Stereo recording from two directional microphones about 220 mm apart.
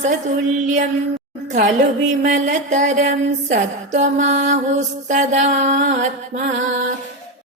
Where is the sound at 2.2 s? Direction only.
35° right (ahead or behind).